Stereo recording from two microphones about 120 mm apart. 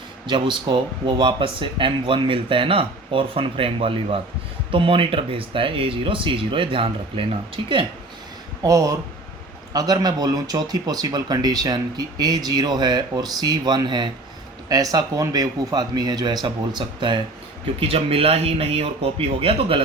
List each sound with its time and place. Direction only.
0.3 s speech: 40° right (ahead or behind)
8.6 s speech: 30° right (ahead or behind)
17.7 s speech: 55° right (ahead or behind)